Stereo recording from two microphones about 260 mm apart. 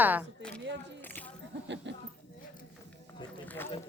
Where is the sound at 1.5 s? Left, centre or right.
Right.